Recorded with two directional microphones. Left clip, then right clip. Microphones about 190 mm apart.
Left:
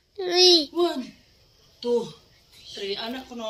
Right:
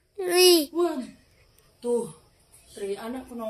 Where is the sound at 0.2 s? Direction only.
10° right (ahead or behind).